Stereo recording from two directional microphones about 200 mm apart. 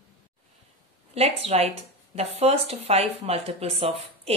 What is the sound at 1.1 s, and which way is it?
Speech, 30° right (ahead or behind).